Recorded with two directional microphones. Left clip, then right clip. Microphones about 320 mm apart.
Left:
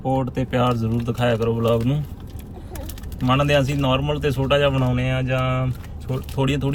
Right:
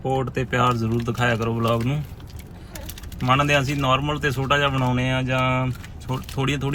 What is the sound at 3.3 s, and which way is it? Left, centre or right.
A man's voice, centre.